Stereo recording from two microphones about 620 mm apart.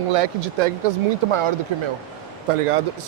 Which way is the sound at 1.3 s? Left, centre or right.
Right.